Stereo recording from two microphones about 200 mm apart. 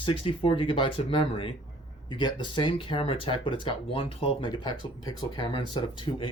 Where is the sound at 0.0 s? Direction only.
25° left (ahead or behind).